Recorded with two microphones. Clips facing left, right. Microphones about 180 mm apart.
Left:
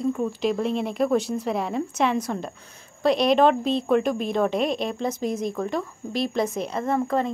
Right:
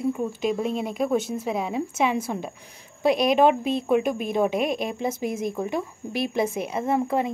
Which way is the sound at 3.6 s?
50° right (ahead or behind).